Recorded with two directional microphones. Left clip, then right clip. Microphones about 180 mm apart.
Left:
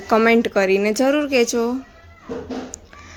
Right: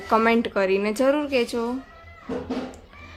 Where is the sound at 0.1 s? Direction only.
25° left (ahead or behind).